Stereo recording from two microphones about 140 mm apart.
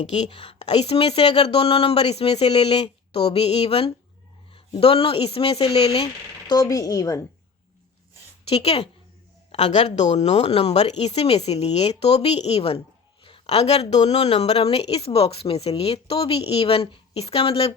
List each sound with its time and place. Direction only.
0.0 s speech: 55° left (ahead or behind)
0.3 s a woman's voice: 35° left (ahead or behind)
0.6 s speech: 50° left (ahead or behind)
6.5 s speech: 25° left (ahead or behind)
8.4 s speech: 45° left (ahead or behind)